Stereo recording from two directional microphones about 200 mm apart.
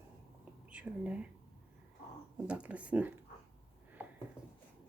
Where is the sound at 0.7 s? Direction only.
5° right (ahead or behind).